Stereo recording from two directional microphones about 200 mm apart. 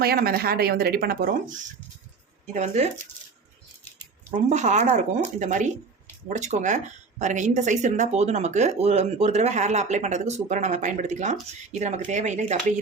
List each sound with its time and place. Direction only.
0.0 s speech: 50° right (ahead or behind)
2.5 s a woman's voice: 35° right (ahead or behind)
4.3 s a woman's voice: 35° right (ahead or behind)